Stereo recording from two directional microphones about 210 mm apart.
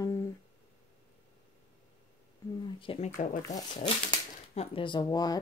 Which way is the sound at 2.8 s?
30° left (ahead or behind).